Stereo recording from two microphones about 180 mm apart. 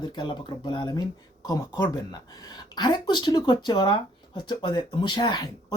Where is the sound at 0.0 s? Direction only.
25° left (ahead or behind).